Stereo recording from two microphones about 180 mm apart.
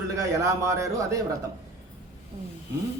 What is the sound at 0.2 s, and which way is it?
A man's voice, 20° right (ahead or behind).